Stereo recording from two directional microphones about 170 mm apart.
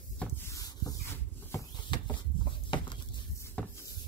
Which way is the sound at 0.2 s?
15° left (ahead or behind).